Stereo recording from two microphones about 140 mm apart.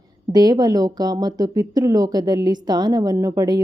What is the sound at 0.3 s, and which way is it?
A woman's voice, 30° right (ahead or behind).